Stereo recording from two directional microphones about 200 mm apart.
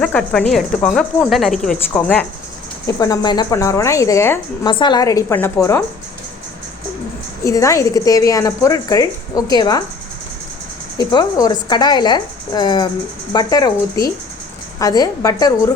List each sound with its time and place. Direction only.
0.0 s speech: 5° left (ahead or behind)
2.8 s speech: 15° left (ahead or behind)
7.4 s speech: 15° left (ahead or behind)
10.9 s speech: 20° left (ahead or behind)